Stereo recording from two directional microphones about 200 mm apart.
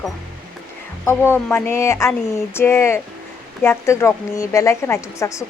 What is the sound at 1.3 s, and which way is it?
A woman's voice, 10° left (ahead or behind).